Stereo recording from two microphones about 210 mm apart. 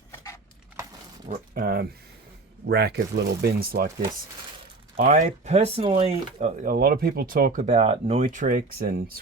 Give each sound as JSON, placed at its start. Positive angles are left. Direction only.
{"t": 1.3, "sound": "speech", "side_deg": -45}
{"t": 4.9, "sound": "speech", "side_deg": -40}
{"t": 6.4, "sound": "speech", "side_deg": -40}